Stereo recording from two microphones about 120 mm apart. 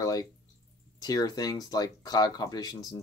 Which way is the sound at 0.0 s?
30° left (ahead or behind).